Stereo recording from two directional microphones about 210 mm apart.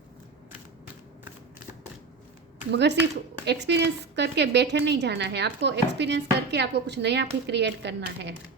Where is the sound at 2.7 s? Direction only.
55° right (ahead or behind).